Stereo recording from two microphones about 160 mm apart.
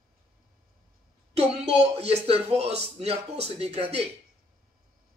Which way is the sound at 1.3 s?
40° right (ahead or behind).